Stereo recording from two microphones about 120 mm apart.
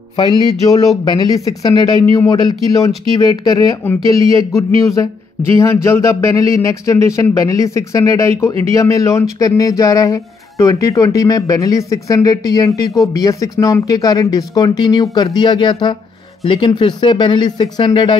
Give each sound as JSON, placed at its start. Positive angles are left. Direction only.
{"t": 0.1, "sound": "speech", "side_deg": 35}
{"t": 5.6, "sound": "speech", "side_deg": 20}